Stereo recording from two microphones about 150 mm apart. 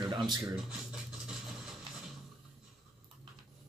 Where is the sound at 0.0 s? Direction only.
30° right (ahead or behind).